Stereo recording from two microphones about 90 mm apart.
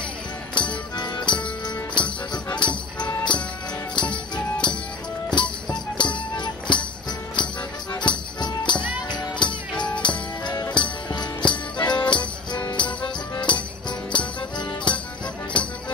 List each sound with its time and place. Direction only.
0.6 s music: 60° left (ahead or behind)
3.9 s music: 60° left (ahead or behind)